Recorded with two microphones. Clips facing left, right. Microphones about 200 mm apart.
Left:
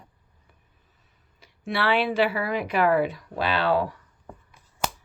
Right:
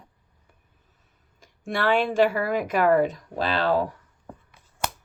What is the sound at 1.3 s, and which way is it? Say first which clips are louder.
Speech: even; 45° right (ahead or behind).